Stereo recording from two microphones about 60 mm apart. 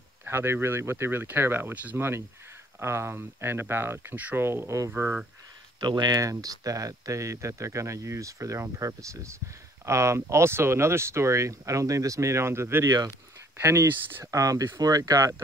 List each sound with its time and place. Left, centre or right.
0.3 s speech: right
4.6 s speech: right
4.9 s speech: right
6.0 s speech: right
12.8 s speech: right
13.6 s speech: right
14.2 s speech: right
14.8 s speech: right